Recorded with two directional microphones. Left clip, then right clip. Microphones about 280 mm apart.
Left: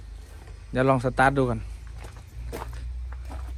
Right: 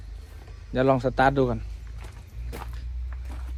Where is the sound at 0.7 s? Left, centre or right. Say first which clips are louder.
Even; left.